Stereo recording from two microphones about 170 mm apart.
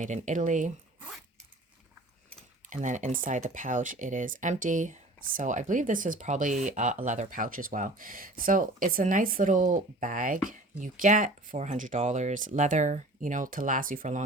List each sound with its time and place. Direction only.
0.0 s speech: 45° right (ahead or behind)
2.6 s speech: 45° right (ahead or behind)